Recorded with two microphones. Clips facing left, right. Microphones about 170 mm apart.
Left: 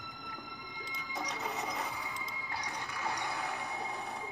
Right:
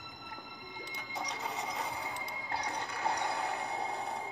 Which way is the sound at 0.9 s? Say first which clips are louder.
Left 1 dB; 65° right (ahead or behind).